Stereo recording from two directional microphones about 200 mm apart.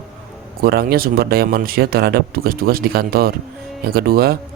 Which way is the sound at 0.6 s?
50° right (ahead or behind).